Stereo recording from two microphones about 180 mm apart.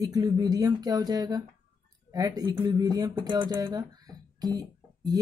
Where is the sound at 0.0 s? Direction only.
20° right (ahead or behind).